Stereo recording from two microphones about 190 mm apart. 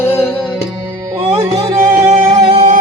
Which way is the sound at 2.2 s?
20° right (ahead or behind).